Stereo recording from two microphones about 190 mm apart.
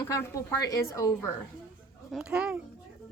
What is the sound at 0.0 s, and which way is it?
Speech, 15° left (ahead or behind).